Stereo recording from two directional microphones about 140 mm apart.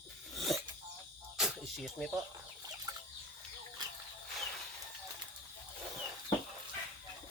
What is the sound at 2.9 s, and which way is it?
Chicken, 30° right (ahead or behind).